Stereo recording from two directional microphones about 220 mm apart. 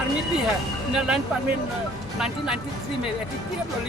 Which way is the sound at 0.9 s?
5° right (ahead or behind).